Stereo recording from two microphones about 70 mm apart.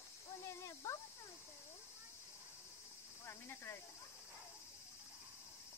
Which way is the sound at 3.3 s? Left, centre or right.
Left.